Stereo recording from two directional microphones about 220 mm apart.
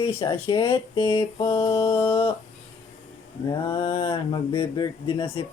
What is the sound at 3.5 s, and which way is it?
Speech, 20° left (ahead or behind).